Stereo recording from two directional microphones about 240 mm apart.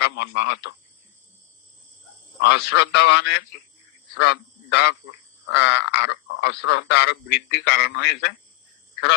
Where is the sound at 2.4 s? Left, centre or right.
Left.